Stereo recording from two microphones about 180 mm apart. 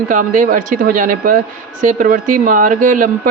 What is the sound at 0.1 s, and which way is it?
Speech, 45° right (ahead or behind).